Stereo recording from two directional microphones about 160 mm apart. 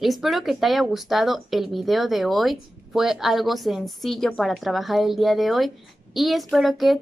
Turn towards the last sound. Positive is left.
turn(degrees=0)  # may be behind; listen again after turning